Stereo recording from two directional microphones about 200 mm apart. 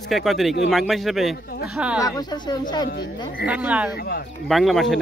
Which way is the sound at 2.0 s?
20° left (ahead or behind).